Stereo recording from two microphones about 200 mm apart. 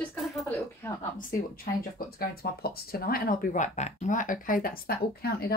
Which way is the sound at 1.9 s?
50° left (ahead or behind).